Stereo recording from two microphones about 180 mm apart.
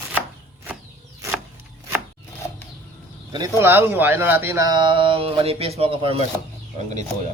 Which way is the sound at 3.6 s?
15° right (ahead or behind).